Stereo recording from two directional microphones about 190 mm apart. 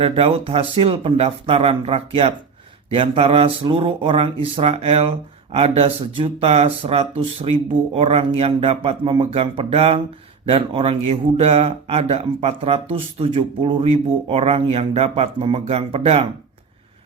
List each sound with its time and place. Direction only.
0.0 s speech: 30° right (ahead or behind)